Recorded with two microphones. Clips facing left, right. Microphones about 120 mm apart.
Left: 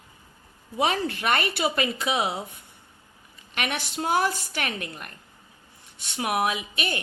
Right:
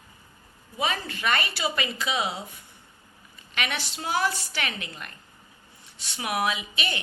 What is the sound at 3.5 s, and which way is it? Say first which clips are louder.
A woman's voice: left 2 dB; 50° left (ahead or behind).